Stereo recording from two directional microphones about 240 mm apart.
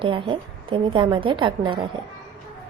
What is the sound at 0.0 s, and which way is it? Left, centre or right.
A woman's voice, right.